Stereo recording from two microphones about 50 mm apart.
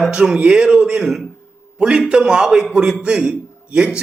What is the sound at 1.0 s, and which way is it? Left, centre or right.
Speech, centre.